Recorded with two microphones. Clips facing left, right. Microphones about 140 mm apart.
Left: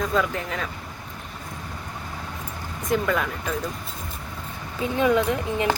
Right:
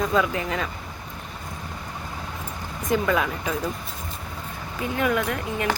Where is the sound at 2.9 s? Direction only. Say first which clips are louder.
Right 1 dB; 5° right (ahead or behind).